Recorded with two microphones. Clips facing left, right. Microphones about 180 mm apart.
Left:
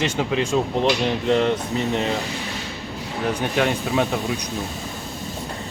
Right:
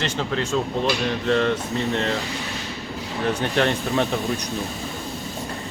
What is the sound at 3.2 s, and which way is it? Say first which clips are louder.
Speech: even; 10° left (ahead or behind).